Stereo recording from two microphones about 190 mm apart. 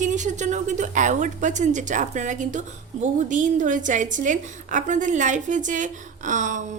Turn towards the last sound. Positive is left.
turn(degrees=-40)  # may be behind; listen again after turning